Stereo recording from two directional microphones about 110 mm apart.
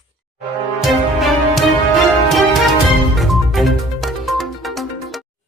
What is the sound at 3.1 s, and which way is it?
Music, centre (ahead or behind).